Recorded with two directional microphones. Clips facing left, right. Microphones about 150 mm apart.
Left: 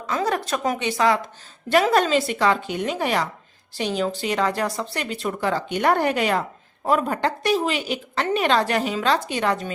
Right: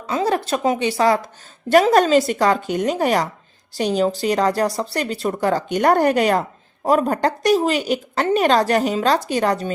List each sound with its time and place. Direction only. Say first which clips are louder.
0.1 s a woman's voice: right 4 dB; 30° right (ahead or behind)